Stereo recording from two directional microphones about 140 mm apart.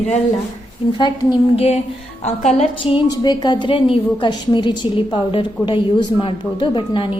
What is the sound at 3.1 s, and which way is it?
A woman's voice, 30° left (ahead or behind).